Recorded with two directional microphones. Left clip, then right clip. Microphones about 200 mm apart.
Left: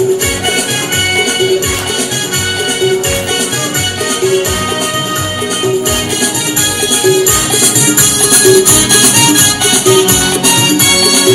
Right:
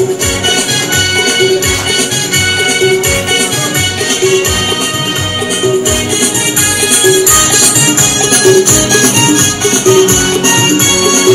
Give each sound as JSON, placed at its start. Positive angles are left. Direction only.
{"t": 8.3, "sound": "music", "side_deg": 45}